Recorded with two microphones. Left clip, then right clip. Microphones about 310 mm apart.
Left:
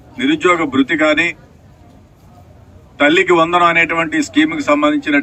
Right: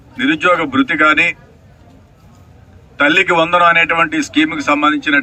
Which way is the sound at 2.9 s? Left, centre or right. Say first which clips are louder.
Even; centre.